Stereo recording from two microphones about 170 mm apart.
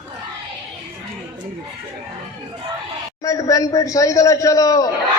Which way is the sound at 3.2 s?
20° left (ahead or behind).